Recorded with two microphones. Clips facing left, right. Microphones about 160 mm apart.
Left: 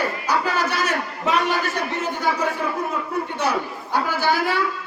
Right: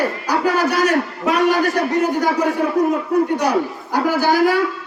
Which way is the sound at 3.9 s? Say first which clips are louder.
Right 5 dB; 40° right (ahead or behind).